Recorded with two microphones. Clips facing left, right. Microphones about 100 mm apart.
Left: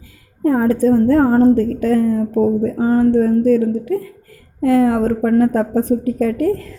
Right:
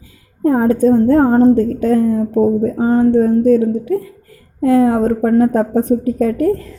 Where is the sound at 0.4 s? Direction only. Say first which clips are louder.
Right 2 dB; 25° right (ahead or behind).